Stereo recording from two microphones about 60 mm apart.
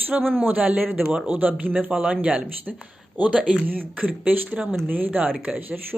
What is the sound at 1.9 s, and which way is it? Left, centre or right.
Speech, centre.